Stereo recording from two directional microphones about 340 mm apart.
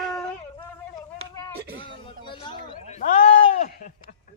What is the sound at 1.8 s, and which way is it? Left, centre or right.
Speech, centre.